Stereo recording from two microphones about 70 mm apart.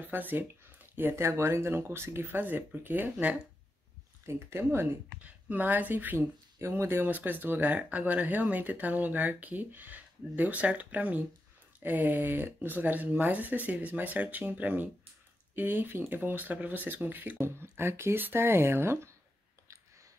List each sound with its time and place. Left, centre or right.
0.1 s speech: right
4.3 s speech: right
5.1 s speech: right
6.1 s speech: right